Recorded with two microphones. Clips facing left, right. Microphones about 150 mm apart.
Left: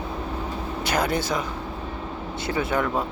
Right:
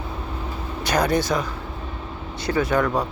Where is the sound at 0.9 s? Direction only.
25° left (ahead or behind).